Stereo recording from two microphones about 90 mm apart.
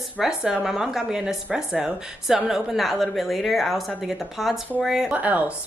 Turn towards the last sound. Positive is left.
turn(degrees=-20)  # may be behind; listen again after turning